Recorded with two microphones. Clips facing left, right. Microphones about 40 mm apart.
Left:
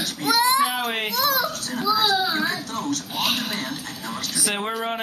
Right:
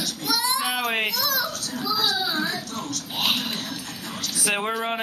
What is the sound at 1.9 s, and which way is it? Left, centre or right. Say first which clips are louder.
Child singing: left 2 dB; left.